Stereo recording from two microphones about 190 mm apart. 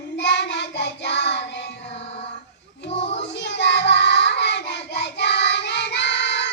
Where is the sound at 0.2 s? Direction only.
70° left (ahead or behind).